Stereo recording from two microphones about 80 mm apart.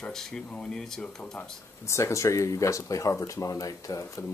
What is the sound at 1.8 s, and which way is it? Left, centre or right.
Speech, left.